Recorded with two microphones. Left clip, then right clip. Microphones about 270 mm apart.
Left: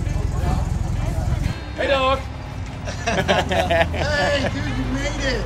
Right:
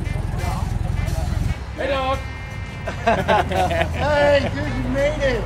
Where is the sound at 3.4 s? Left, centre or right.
Left.